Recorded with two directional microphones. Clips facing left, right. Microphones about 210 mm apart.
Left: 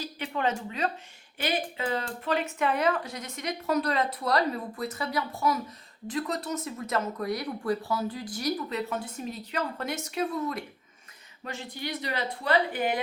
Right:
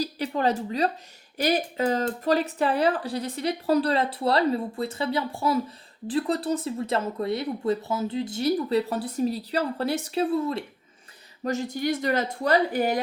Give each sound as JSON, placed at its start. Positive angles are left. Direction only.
{"t": 0.0, "sound": "speech", "side_deg": -35}
{"t": 11.4, "sound": "speech", "side_deg": -45}